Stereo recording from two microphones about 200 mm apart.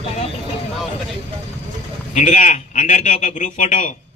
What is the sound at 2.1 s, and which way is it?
A man's voice, 35° left (ahead or behind).